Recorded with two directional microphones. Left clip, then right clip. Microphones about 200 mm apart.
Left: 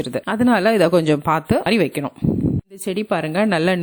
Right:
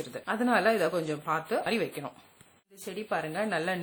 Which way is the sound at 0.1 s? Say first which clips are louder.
Left 9 dB; 45° left (ahead or behind).